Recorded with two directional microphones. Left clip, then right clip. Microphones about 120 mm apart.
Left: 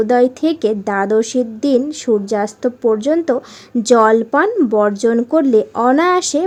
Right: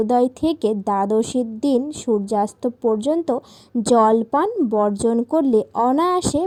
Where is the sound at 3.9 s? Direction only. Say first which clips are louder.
Left 4 dB; 40° right (ahead or behind).